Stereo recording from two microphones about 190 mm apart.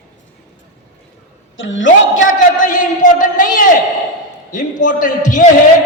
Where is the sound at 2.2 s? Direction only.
45° left (ahead or behind).